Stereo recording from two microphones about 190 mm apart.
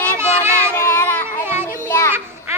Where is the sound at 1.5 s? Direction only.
15° right (ahead or behind).